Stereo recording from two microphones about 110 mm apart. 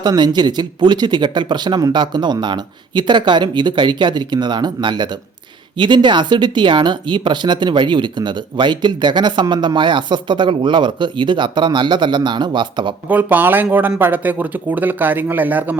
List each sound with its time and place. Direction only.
0.0 s speech: 40° right (ahead or behind)
13.1 s speech: 15° right (ahead or behind)